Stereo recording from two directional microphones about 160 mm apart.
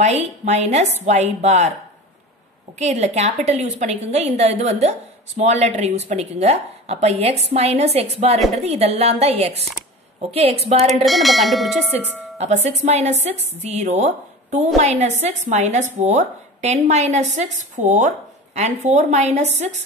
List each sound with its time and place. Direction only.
0.0 s speech: 45° right (ahead or behind)
2.8 s a woman's voice: 45° right (ahead or behind)
11.1 s speech: centre (ahead or behind)
12.4 s speech: 45° right (ahead or behind)